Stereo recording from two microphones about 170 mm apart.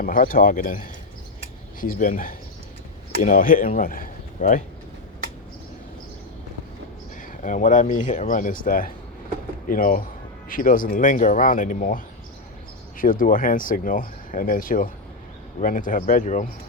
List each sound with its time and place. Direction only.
0.0 s speech: 55° left (ahead or behind)
7.2 s speech: 50° left (ahead or behind)